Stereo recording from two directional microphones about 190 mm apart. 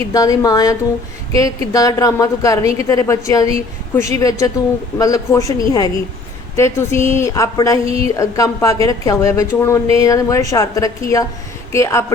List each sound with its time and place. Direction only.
0.1 s a woman's voice: 20° left (ahead or behind)